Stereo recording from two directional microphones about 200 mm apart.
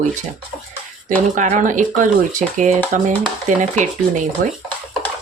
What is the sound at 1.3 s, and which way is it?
Speech, 35° right (ahead or behind).